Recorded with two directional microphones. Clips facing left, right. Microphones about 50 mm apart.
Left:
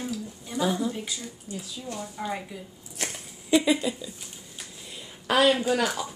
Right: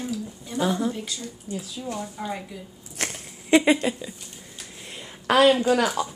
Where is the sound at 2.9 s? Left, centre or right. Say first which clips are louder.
Right 3 dB; right.